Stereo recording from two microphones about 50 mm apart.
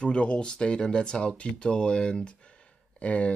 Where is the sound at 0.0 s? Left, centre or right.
Left.